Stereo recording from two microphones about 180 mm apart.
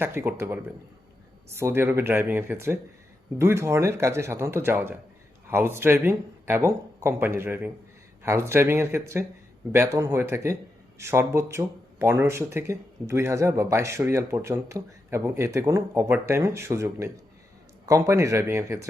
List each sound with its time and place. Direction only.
0.0 s speech: 10° right (ahead or behind)